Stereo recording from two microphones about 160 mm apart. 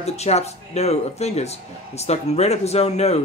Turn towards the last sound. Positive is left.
turn(degrees=40)  # may be behind; listen again after turning